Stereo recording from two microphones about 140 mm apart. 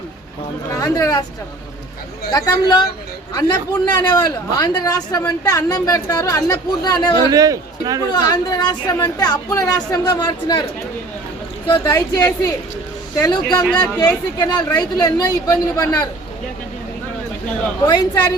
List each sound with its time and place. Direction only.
0.8 s a woman's voice: 25° left (ahead or behind)
2.3 s a woman's voice: 30° left (ahead or behind)
3.9 s a woman's voice: 30° left (ahead or behind)
7.3 s a man's voice: 25° right (ahead or behind)
8.1 s a woman's voice: 30° left (ahead or behind)
11.7 s a woman's voice: 30° left (ahead or behind)
17.8 s a woman's voice: 30° left (ahead or behind)